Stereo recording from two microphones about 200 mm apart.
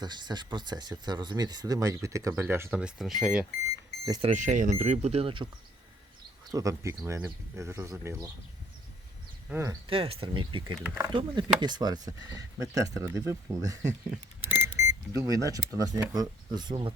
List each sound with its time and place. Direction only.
0.0 s speech: 20° right (ahead or behind); by 3.4 s centre (ahead or behind)
4.2 s speech: 35° right (ahead or behind)
6.5 s speech: 15° right (ahead or behind)
9.5 s speech: 15° right (ahead or behind)
9.8 s speech: 25° right (ahead or behind)
14.1 s a sound: 10° right (ahead or behind)
14.8 s speech: 15° right (ahead or behind)